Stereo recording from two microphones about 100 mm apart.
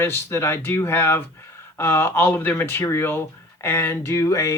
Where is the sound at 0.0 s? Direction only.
25° left (ahead or behind).